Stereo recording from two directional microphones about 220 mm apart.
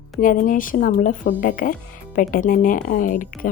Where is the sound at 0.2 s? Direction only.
35° left (ahead or behind).